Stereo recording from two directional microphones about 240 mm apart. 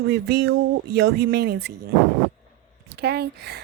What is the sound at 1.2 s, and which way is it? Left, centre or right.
Speech, right.